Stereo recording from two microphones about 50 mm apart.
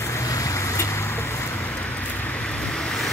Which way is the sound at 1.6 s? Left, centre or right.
Left.